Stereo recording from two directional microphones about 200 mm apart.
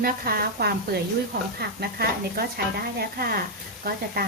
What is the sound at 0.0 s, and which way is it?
A woman's voice, 50° right (ahead or behind).